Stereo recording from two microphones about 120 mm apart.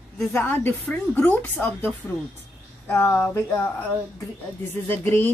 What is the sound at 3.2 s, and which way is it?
Speech, 15° left (ahead or behind).